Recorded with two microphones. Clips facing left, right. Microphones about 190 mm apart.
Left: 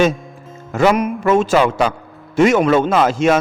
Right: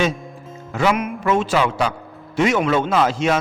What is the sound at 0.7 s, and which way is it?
A man's voice, 45° left (ahead or behind).